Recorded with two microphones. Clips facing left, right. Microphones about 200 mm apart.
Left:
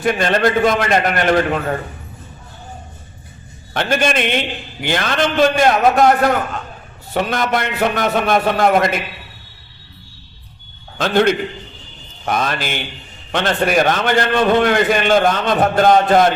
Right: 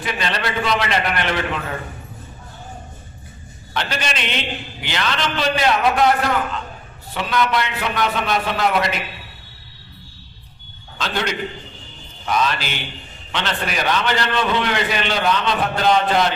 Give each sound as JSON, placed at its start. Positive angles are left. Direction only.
{"t": 0.0, "sound": "a man's voice", "side_deg": 50}
{"t": 3.8, "sound": "a man's voice", "side_deg": 50}
{"t": 10.9, "sound": "a man's voice", "side_deg": 50}